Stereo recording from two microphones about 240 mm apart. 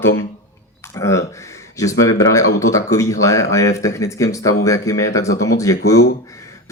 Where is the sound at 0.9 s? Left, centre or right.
Centre.